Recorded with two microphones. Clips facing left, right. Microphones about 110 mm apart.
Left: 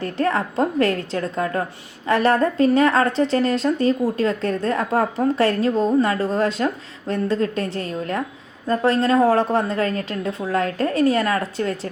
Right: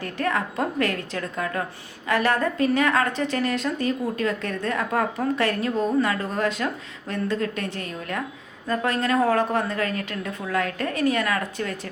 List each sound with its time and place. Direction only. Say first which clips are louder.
0.0 s a woman's voice: left 4 dB; 30° left (ahead or behind)